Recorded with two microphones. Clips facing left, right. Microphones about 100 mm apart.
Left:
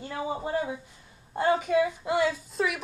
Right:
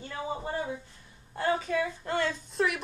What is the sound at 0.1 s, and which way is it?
A woman's voice, 20° left (ahead or behind).